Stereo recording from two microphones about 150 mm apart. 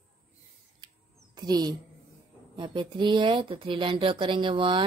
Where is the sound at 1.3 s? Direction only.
25° right (ahead or behind).